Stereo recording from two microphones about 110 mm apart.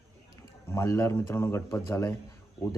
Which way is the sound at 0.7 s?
25° left (ahead or behind).